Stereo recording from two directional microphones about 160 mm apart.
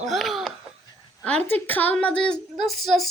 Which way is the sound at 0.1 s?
Centre (ahead or behind).